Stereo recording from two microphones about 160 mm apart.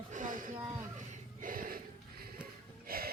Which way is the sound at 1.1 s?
60° right (ahead or behind).